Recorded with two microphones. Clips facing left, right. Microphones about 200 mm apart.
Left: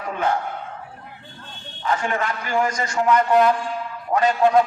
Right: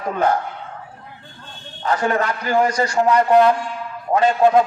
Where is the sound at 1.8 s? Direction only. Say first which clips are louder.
Right 4 dB; 40° right (ahead or behind).